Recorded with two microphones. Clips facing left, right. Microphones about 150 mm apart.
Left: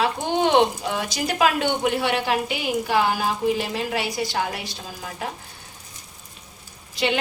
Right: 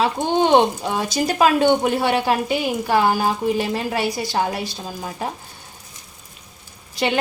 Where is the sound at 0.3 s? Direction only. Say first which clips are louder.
Right 3 dB; 35° right (ahead or behind).